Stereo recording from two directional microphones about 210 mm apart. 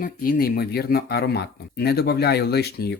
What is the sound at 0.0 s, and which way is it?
Speech, 45° left (ahead or behind).